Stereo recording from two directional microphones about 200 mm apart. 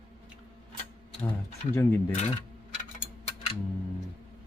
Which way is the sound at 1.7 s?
10° left (ahead or behind).